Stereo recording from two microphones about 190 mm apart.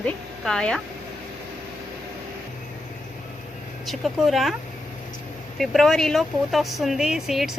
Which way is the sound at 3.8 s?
Centre (ahead or behind).